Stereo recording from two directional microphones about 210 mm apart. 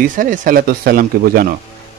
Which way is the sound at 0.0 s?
40° right (ahead or behind).